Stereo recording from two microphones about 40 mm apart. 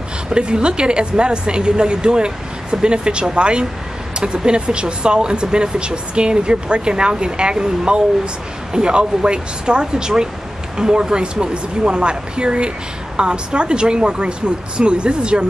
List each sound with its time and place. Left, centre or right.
0.3 s speech: right